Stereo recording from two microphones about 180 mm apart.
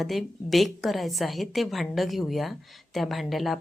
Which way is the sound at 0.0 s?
Centre (ahead or behind).